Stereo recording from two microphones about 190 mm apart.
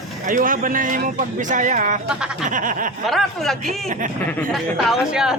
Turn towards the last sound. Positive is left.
turn(degrees=-5)  # may be behind; listen again after turning